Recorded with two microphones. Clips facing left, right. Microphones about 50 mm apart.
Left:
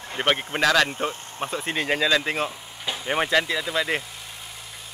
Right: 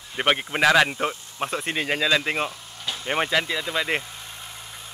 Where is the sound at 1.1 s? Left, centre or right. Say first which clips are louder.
Left 4 dB; left.